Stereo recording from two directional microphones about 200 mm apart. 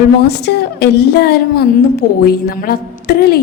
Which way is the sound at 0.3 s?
55° left (ahead or behind).